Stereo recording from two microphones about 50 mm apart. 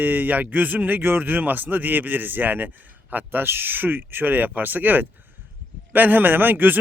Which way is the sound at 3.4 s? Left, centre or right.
Right.